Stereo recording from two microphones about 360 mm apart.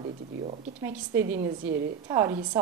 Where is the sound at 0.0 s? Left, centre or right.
Centre.